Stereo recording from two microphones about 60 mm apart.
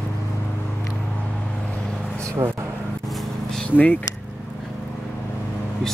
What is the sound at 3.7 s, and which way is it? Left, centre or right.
Speech, left.